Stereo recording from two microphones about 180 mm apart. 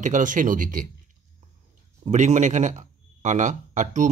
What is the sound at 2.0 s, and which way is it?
Speech, 40° right (ahead or behind).